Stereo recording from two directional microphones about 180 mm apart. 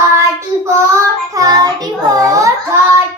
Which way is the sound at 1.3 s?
20° right (ahead or behind).